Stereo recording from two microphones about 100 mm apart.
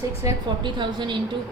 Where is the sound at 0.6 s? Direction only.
50° right (ahead or behind).